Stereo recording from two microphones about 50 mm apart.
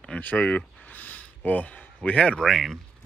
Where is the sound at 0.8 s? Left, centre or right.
Left.